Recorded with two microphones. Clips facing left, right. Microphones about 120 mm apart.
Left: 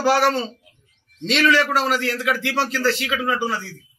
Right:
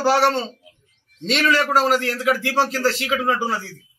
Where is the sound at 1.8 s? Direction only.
45° right (ahead or behind).